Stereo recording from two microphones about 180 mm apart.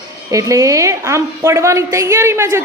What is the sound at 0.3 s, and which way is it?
A woman's voice, 20° right (ahead or behind).